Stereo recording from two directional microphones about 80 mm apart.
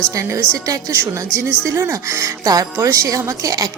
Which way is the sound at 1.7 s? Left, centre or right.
Right.